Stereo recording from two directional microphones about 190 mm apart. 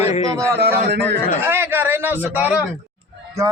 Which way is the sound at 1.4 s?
10° right (ahead or behind).